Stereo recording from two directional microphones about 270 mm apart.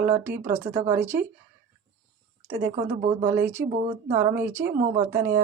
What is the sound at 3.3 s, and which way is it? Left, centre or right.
Speech, centre.